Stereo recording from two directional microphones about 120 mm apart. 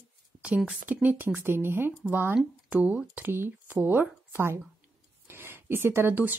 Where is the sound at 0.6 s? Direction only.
5° right (ahead or behind).